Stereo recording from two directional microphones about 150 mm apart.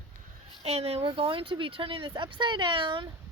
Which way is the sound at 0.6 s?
45° right (ahead or behind).